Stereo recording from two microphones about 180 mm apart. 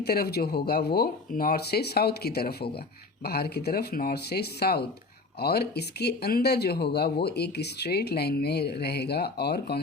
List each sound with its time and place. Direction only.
0.0 s speech: 60° left (ahead or behind)